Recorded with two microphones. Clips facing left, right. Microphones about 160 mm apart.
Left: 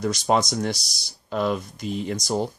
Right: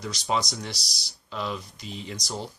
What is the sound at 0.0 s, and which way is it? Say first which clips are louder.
Speech: left 7 dB; 50° left (ahead or behind).